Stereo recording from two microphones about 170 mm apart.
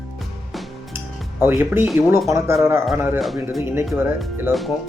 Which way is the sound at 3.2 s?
Centre (ahead or behind).